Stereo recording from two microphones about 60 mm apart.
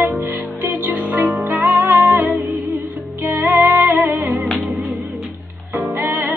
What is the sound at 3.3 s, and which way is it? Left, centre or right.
Music, right.